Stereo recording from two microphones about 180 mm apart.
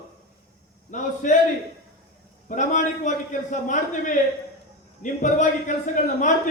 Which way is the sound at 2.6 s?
45° left (ahead or behind).